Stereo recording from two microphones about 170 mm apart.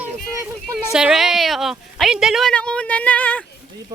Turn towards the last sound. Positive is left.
turn(degrees=10)  # may be behind; listen again after turning